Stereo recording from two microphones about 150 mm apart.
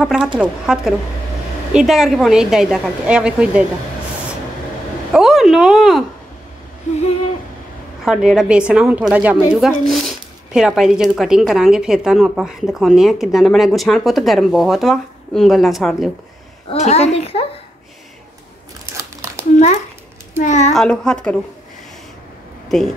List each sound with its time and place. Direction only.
0.0 s speech: 5° right (ahead or behind)
5.1 s speech: centre (ahead or behind)
8.0 s speech: 5° right (ahead or behind)
16.6 s a child's voice: 45° left (ahead or behind)
20.3 s a child's voice: 50° left (ahead or behind)
20.7 s speech: 5° left (ahead or behind)